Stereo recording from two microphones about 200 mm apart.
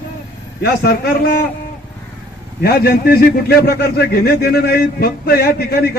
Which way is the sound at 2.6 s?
50° left (ahead or behind).